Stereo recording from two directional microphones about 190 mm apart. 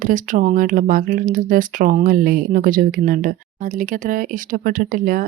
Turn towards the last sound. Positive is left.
turn(degrees=-45)  # may be behind; listen again after turning